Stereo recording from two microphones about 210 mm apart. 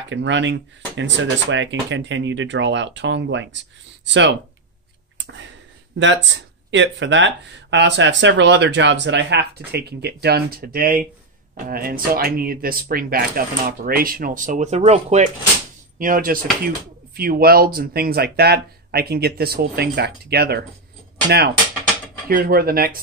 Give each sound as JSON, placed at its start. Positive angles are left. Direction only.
{"t": 0.1, "sound": "speech", "side_deg": -60}
{"t": 5.1, "sound": "a sound", "side_deg": -60}
{"t": 5.9, "sound": "speech", "side_deg": -60}
{"t": 22.3, "sound": "speech", "side_deg": -45}